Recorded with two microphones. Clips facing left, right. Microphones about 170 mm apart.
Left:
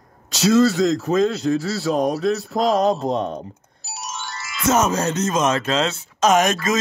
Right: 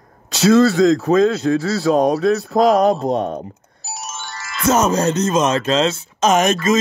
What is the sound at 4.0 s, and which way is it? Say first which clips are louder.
Music: left 1 dB; 50° right (ahead or behind).